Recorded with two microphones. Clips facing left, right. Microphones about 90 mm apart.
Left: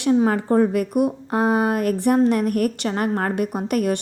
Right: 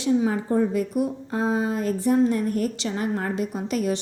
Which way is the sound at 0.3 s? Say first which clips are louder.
Left 4 dB; 65° left (ahead or behind).